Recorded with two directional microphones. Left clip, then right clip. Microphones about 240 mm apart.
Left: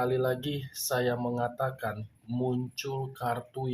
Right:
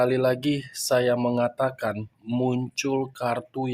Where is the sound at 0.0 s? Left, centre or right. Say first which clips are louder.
Right 7 dB; right.